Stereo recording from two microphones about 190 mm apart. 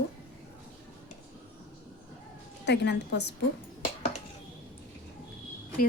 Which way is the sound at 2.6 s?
65° left (ahead or behind).